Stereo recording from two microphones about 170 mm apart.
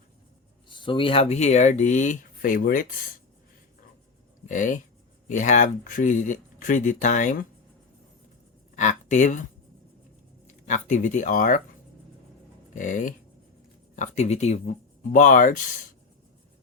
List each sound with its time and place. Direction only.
0.7 s speech: 30° left (ahead or behind); by 2.8 s 55° left (ahead or behind)
4.4 s speech: 50° left (ahead or behind)
8.7 s speech: 45° left (ahead or behind)
12.7 s speech: 50° left (ahead or behind)
15.1 s speech: 50° left (ahead or behind)